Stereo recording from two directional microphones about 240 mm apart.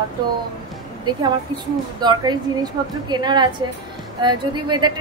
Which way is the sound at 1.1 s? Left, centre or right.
Centre.